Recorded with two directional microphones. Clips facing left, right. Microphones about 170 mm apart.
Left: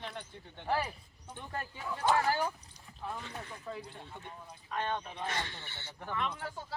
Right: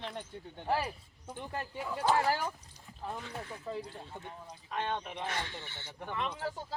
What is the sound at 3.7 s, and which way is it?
Speech, 35° right (ahead or behind).